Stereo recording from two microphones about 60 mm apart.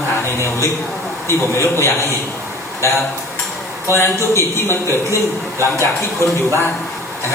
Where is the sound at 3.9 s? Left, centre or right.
Left.